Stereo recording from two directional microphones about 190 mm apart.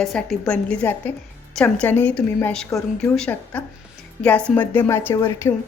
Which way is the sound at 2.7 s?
15° left (ahead or behind).